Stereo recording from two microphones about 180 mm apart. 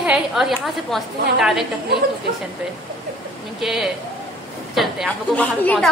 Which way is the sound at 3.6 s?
Centre (ahead or behind).